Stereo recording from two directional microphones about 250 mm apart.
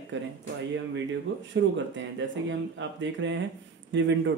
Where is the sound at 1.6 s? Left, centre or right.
Right.